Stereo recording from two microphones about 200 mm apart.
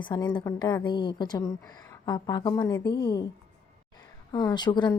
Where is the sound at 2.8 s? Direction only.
55° left (ahead or behind).